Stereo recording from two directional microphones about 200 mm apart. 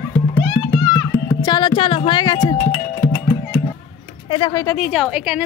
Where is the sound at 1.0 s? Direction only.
20° left (ahead or behind).